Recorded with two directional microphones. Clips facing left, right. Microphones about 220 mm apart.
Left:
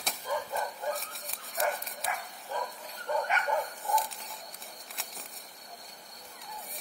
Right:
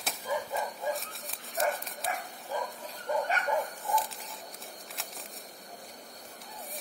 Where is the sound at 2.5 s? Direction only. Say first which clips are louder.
Right 2 dB; 10° right (ahead or behind).